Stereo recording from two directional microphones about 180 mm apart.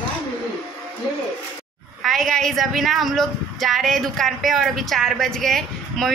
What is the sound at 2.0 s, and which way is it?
A woman's voice, centre (ahead or behind).